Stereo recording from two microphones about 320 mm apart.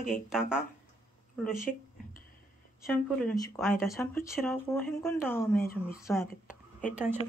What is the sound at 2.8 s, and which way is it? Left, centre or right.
Speech, centre.